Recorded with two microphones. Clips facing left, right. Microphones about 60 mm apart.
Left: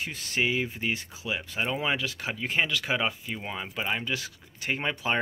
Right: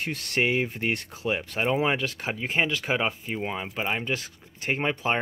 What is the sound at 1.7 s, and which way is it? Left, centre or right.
Speech, right.